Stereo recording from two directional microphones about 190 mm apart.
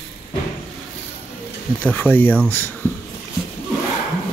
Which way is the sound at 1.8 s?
10° left (ahead or behind).